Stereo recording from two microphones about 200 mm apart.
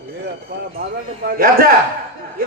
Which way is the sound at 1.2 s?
45° right (ahead or behind).